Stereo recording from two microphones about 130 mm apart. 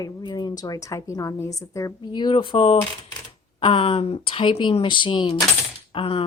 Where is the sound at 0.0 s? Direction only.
35° left (ahead or behind).